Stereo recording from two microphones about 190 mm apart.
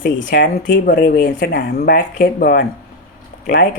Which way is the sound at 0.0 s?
45° left (ahead or behind).